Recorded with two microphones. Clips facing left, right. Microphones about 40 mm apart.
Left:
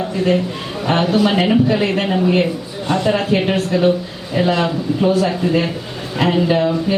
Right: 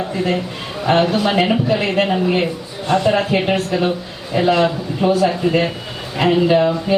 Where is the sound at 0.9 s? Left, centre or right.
Centre.